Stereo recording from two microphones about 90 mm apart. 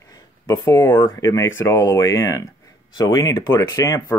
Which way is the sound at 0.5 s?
30° left (ahead or behind).